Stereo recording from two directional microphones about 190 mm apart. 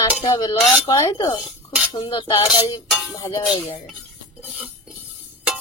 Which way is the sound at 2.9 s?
Centre (ahead or behind).